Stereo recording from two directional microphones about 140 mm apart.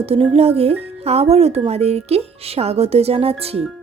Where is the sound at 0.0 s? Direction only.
45° right (ahead or behind).